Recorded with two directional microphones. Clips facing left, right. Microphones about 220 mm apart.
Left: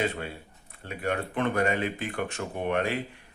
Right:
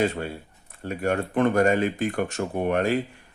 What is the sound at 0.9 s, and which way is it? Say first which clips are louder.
Speech: right 5 dB; 45° right (ahead or behind).